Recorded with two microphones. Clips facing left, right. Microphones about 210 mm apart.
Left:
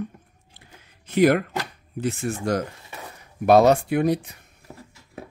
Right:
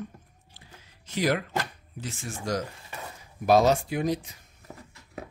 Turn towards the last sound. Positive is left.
turn(degrees=60)  # may be behind; listen again after turning